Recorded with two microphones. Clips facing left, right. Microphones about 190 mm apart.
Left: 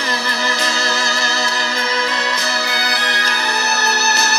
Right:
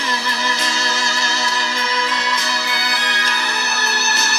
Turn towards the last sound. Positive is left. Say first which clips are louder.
# left 4 dB
turn(degrees=40)  # may be behind; listen again after turning